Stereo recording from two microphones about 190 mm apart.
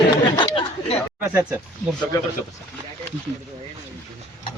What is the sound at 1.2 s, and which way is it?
Speech, 10° right (ahead or behind).